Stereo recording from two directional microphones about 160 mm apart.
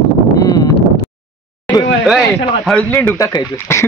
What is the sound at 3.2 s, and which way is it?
Speech, 20° left (ahead or behind).